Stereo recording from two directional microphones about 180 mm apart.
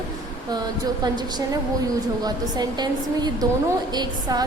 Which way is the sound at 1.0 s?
20° right (ahead or behind).